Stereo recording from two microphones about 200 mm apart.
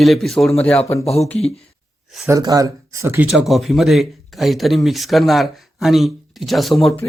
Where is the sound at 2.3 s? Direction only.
20° right (ahead or behind).